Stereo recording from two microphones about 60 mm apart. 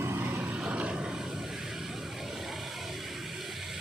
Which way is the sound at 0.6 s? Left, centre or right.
Centre.